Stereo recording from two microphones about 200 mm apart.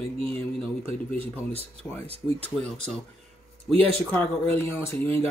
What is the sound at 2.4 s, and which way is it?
Speech, 5° left (ahead or behind).